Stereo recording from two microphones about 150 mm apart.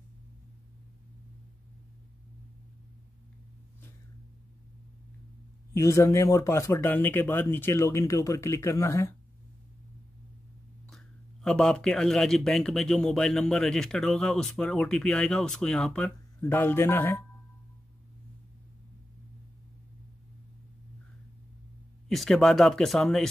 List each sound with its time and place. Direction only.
5.8 s speech: 20° left (ahead or behind)
10.9 s a man's voice: centre (ahead or behind)
22.1 s a man's voice: centre (ahead or behind)